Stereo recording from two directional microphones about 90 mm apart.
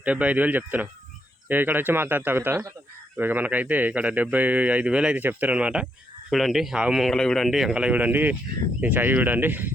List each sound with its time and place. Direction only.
0.0 s a man's voice: 15° right (ahead or behind)